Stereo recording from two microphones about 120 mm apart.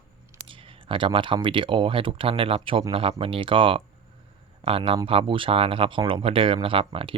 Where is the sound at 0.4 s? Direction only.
45° right (ahead or behind).